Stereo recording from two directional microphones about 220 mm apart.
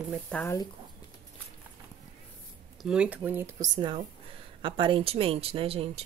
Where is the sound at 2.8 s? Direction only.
5° right (ahead or behind); by 5.9 s 25° right (ahead or behind).